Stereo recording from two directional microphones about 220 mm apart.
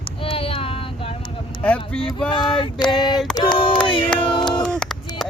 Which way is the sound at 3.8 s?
20° left (ahead or behind).